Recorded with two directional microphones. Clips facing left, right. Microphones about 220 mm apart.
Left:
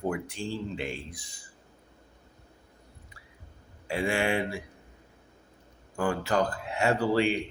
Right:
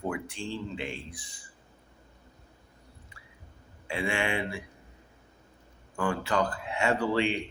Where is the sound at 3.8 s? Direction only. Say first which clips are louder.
Left 3 dB; 40° left (ahead or behind).